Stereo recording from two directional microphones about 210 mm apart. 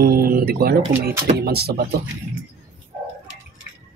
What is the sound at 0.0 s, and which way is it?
Speech, 45° right (ahead or behind).